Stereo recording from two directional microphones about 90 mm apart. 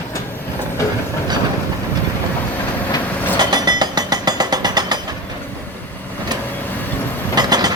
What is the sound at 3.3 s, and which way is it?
Vehicle, 50° right (ahead or behind).